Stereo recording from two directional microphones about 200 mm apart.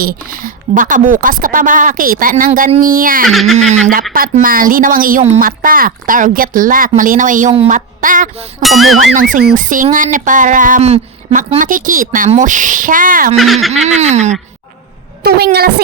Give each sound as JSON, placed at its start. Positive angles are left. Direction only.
{"t": 0.0, "sound": "a woman's voice", "side_deg": -45}
{"t": 3.2, "sound": "speech", "side_deg": 0}
{"t": 3.6, "sound": "a woman's voice", "side_deg": -35}
{"t": 7.5, "sound": "a woman's voice", "side_deg": -30}
{"t": 8.0, "sound": "speech", "side_deg": -40}
{"t": 8.6, "sound": "speech", "side_deg": 0}
{"t": 9.3, "sound": "speech", "side_deg": -45}
{"t": 13.3, "sound": "speech", "side_deg": 0}
{"t": 13.8, "sound": "speech", "side_deg": -35}
{"t": 15.2, "sound": "a woman's voice", "side_deg": -55}